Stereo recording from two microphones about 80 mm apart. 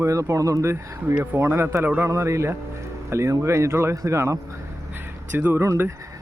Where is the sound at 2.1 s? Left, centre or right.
Right.